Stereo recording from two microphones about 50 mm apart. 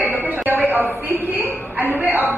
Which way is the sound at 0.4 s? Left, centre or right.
Right.